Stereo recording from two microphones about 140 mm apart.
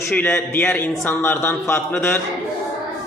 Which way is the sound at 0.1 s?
15° left (ahead or behind).